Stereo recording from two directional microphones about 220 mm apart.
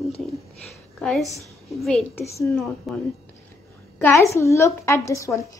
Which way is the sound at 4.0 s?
10° left (ahead or behind).